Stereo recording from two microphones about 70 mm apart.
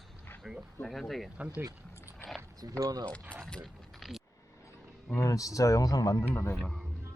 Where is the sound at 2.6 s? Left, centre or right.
Right.